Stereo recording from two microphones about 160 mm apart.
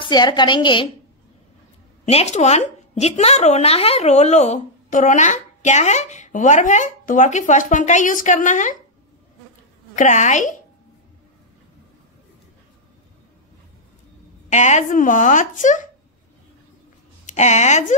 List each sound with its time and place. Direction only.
0.0 s a woman's voice: 30° left (ahead or behind)
2.0 s a woman's voice: 45° left (ahead or behind)
9.9 s a woman's voice: 50° left (ahead or behind)
14.5 s a woman's voice: 50° left (ahead or behind)
17.3 s a woman's voice: 45° left (ahead or behind)